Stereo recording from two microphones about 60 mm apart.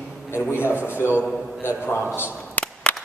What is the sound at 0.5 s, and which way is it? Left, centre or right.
Speech, left.